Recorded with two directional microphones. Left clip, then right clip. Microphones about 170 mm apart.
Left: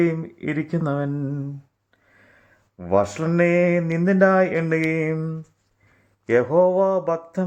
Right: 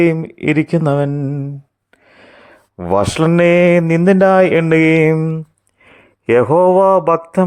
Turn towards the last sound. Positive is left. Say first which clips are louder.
# right 10 dB
turn(degrees=-35)  # may be behind; listen again after turning